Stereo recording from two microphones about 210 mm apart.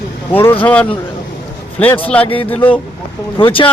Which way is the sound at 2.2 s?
25° left (ahead or behind).